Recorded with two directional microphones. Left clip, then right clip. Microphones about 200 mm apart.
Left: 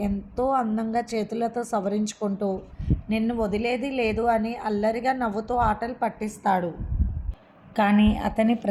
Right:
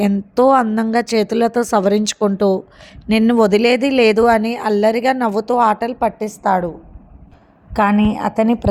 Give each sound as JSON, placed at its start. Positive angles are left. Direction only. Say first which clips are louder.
{"t": 0.0, "sound": "a woman's voice", "louder": "right 13 dB", "side_deg": -45}
{"t": 7.7, "sound": "a woman's voice", "louder": "right 6 dB", "side_deg": -30}